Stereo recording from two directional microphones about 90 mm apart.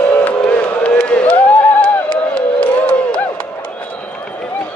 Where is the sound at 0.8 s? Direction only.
15° left (ahead or behind).